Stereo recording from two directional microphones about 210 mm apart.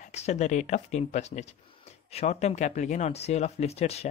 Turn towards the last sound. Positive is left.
turn(degrees=30)  # may be behind; listen again after turning